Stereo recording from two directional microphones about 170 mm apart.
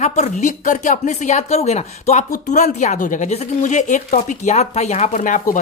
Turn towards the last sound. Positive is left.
turn(degrees=45)  # may be behind; listen again after turning